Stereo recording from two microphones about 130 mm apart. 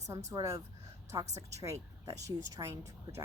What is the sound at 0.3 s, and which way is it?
Speech, 25° right (ahead or behind).